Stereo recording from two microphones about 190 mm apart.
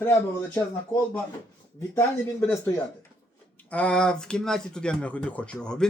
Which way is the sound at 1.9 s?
10° left (ahead or behind).